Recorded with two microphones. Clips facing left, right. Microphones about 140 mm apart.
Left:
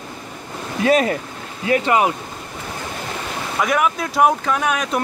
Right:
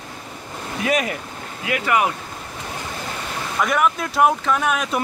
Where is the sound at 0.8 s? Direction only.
35° left (ahead or behind).